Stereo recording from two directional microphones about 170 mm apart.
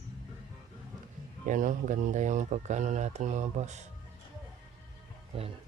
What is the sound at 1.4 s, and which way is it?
Speech, 50° right (ahead or behind).